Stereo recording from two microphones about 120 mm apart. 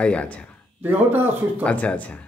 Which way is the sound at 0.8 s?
15° right (ahead or behind).